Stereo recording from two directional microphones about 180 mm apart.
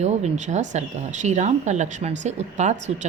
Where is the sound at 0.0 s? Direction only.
40° right (ahead or behind).